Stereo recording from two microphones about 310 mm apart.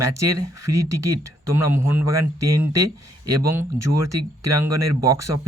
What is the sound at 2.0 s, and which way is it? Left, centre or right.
Speech, right.